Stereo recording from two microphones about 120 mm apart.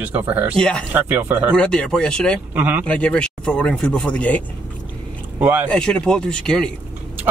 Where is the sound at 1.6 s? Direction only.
10° left (ahead or behind).